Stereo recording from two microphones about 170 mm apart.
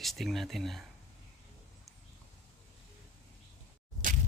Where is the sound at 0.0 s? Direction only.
Centre (ahead or behind).